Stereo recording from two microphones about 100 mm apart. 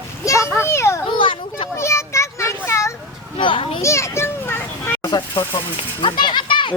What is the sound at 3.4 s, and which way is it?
Speech, 60° left (ahead or behind).